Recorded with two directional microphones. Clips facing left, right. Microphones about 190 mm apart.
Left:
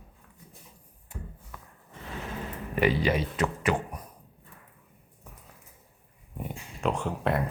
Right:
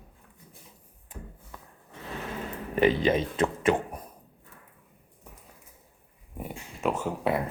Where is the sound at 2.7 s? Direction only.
20° right (ahead or behind).